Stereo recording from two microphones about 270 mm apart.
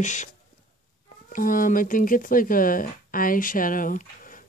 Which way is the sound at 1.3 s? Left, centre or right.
Left.